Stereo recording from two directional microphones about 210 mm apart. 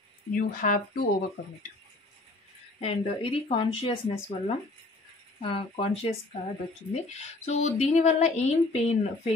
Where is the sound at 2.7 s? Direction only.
30° left (ahead or behind).